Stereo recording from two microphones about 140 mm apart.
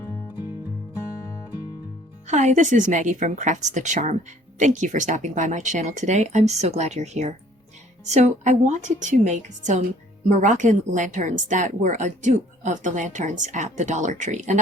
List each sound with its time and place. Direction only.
2.2 s a woman's voice: 60° right (ahead or behind)